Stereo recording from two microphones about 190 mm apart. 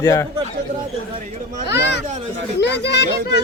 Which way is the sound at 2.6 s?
65° left (ahead or behind).